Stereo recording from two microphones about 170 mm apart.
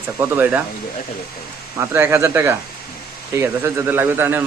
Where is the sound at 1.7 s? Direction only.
15° right (ahead or behind).